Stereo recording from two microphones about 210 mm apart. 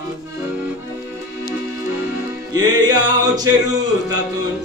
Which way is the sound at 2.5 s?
20° right (ahead or behind).